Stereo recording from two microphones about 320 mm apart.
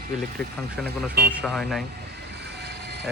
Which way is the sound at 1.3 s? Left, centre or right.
Centre.